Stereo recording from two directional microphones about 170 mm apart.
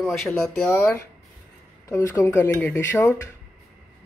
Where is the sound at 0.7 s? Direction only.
15° left (ahead or behind).